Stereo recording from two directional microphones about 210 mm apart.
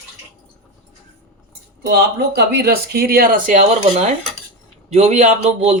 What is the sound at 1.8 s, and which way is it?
Speech, 50° right (ahead or behind).